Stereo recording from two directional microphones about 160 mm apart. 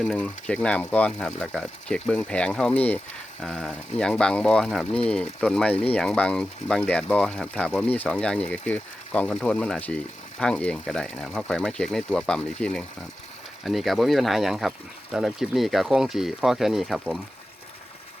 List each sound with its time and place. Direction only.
0.0 s speech: 5° left (ahead or behind)